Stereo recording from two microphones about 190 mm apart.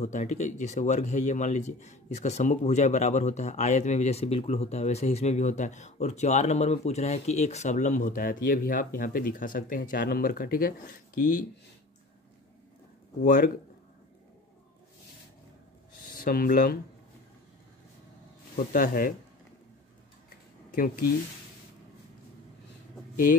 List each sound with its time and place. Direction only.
0.0 s speech: 35° left (ahead or behind)
13.2 s speech: 45° left (ahead or behind)
16.2 s speech: 50° left (ahead or behind)
18.7 s speech: 45° left (ahead or behind)
20.7 s speech: 45° left (ahead or behind)